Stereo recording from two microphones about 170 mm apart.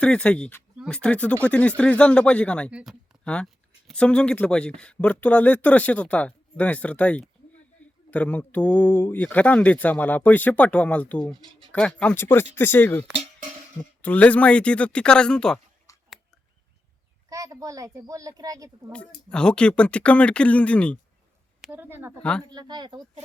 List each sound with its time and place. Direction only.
0.0 s speech: 5° left (ahead or behind)
2.6 s speech: 5° right (ahead or behind)
15.9 s a sound: 20° left (ahead or behind)
17.2 s speech: 20° right (ahead or behind)
18.9 s speech: 5° left (ahead or behind)
21.6 s speech: 10° right (ahead or behind)
22.2 s speech: 5° left (ahead or behind)
22.4 s speech: 25° right (ahead or behind)